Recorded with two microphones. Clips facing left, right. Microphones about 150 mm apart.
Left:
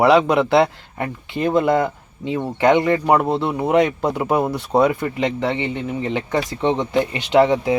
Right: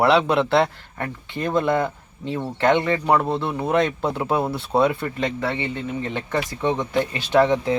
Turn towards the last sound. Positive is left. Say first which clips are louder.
# left 3 dB
turn(degrees=15)  # may be behind; listen again after turning